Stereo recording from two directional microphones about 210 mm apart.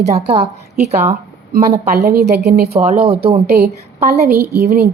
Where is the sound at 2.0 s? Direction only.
50° right (ahead or behind).